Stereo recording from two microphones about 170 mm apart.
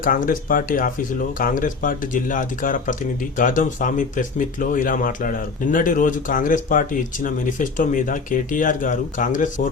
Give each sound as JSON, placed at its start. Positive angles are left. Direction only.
{"t": 0.0, "sound": "speech", "side_deg": 55}